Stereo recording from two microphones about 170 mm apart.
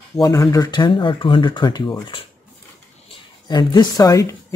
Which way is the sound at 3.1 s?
30° left (ahead or behind).